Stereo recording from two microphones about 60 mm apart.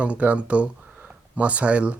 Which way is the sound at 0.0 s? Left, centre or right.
Right.